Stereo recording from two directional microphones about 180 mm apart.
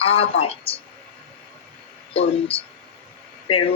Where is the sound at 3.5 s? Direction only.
30° left (ahead or behind).